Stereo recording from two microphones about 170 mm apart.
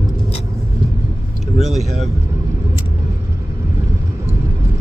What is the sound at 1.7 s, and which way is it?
Speech, centre (ahead or behind).